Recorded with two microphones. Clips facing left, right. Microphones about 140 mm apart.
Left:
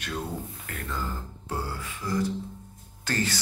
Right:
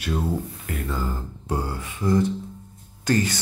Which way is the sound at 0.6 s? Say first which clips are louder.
Right 5 dB; 10° right (ahead or behind).